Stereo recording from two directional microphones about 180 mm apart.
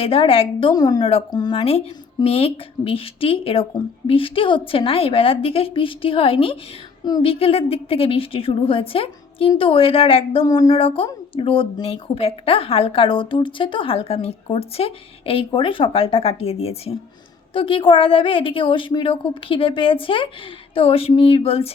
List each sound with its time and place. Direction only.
0.0 s a woman's voice: 30° left (ahead or behind)
0.7 s a woman's voice: 20° left (ahead or behind)